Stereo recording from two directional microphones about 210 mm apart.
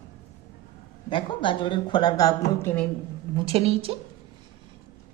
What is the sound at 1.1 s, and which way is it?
A woman's voice, 20° left (ahead or behind).